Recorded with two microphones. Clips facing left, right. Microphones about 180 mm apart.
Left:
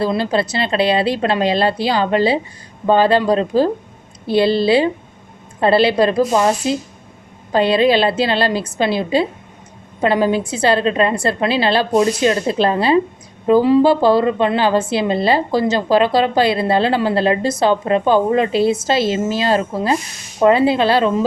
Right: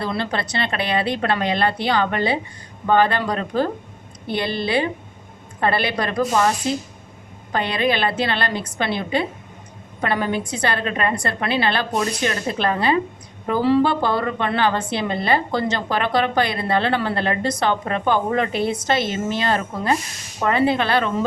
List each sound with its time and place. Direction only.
0.0 s a woman's voice: 25° left (ahead or behind)